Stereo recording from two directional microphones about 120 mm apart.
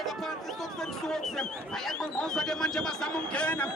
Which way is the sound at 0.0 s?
Centre (ahead or behind).